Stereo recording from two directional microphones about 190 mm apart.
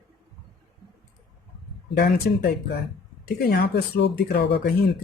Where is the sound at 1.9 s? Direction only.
55° left (ahead or behind).